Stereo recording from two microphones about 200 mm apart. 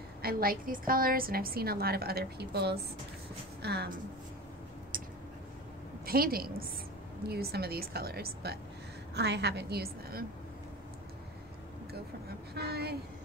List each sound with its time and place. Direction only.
0.2 s a woman's voice: 45° right (ahead or behind)
4.9 s a sound: 45° right (ahead or behind)
6.0 s a woman's voice: 50° right (ahead or behind)
12.5 s a woman's voice: 55° right (ahead or behind)